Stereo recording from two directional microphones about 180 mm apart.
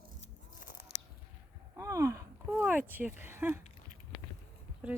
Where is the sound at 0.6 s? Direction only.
45° left (ahead or behind).